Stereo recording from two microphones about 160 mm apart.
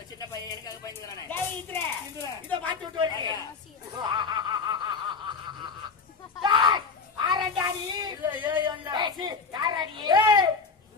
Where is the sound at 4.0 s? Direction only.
25° right (ahead or behind).